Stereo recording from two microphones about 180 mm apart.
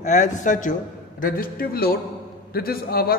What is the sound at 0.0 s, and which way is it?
A man's voice, 40° left (ahead or behind).